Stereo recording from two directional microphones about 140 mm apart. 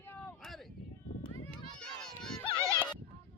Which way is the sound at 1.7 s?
5° left (ahead or behind).